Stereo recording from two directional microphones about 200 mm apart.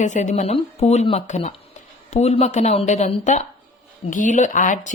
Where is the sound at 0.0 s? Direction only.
40° left (ahead or behind).